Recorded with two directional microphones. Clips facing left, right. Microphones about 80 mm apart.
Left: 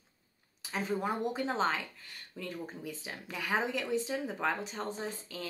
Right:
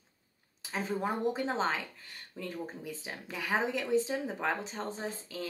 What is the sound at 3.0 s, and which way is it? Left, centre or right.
Speech, right.